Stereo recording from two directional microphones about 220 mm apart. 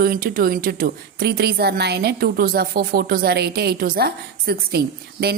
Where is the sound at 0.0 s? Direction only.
40° right (ahead or behind).